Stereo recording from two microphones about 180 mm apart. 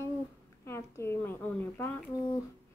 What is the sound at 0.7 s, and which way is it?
Speech, 15° left (ahead or behind).